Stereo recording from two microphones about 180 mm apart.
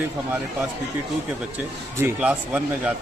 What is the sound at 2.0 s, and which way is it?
Speech, 5° right (ahead or behind).